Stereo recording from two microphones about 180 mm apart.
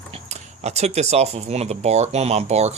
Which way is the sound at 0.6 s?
35° right (ahead or behind).